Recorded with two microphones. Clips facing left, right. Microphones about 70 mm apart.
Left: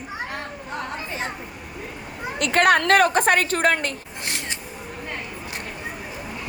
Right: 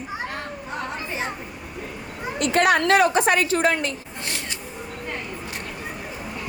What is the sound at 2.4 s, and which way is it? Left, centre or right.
A woman's voice, left.